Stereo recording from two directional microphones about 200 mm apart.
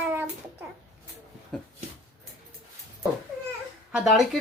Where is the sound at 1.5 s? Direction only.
5° left (ahead or behind).